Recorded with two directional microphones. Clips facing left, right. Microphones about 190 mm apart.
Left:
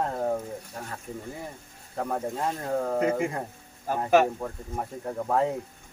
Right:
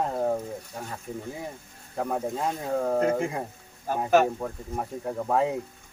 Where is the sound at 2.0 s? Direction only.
5° right (ahead or behind).